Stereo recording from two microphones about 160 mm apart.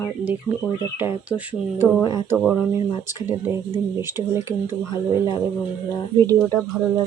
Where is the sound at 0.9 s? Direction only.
10° right (ahead or behind).